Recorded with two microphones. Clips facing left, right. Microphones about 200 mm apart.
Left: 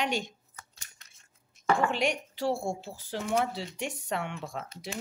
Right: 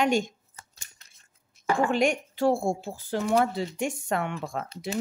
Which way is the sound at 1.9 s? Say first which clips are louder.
Right 5 dB; 50° right (ahead or behind).